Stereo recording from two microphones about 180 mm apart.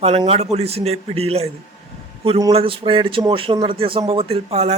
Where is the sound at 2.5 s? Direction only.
30° right (ahead or behind).